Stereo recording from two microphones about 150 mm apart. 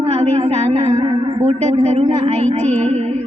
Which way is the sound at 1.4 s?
45° right (ahead or behind).